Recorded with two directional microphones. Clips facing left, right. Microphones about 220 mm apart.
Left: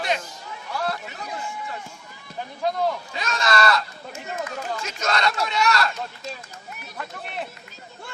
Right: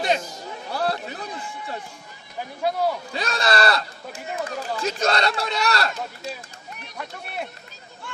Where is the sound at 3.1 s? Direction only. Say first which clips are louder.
Right 1 dB; 35° right (ahead or behind).